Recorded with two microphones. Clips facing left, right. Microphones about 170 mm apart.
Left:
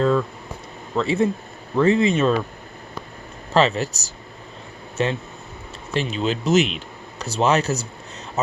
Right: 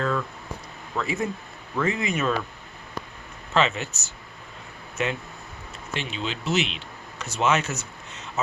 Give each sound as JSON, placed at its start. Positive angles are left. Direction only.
{"t": 0.9, "sound": "speech", "side_deg": 30}
{"t": 3.5, "sound": "speech", "side_deg": 35}